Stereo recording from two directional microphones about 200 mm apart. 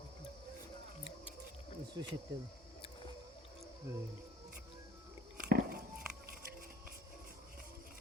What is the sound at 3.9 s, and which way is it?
Speech, 15° right (ahead or behind).